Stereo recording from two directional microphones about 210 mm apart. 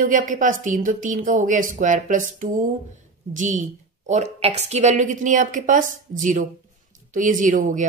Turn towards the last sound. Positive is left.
turn(degrees=-35)  # may be behind; listen again after turning